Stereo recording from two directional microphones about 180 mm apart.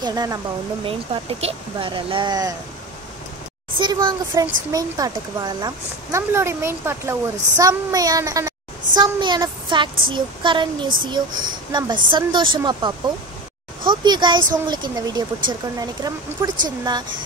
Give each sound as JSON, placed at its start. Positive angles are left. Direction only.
{"t": 0.0, "sound": "a woman's voice", "side_deg": -20}
{"t": 3.8, "sound": "a woman's voice", "side_deg": -25}